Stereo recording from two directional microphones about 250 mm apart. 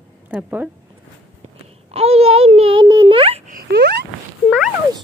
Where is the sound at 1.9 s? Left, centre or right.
Right.